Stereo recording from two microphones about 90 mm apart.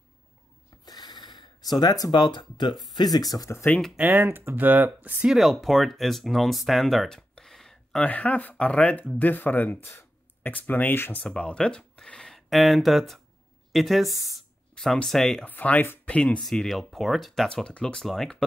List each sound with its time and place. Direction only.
0.8 s gasp: 45° left (ahead or behind)
2.9 s speech: 45° left (ahead or behind)
3.9 s speech: 20° right (ahead or behind)
5.2 s speech: centre (ahead or behind)
8.0 s speech: 15° left (ahead or behind)
11.2 s speech: 10° left (ahead or behind)
15.4 s speech: 20° left (ahead or behind)
16.2 s speech: 10° left (ahead or behind)
17.5 s speech: 10° left (ahead or behind)